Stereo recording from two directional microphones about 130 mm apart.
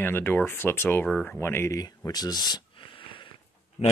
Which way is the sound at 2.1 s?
30° left (ahead or behind).